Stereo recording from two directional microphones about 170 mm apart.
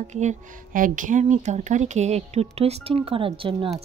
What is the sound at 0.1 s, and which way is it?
Speech, 45° right (ahead or behind).